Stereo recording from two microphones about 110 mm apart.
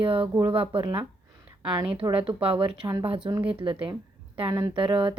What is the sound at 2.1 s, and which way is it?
Speech, 55° right (ahead or behind).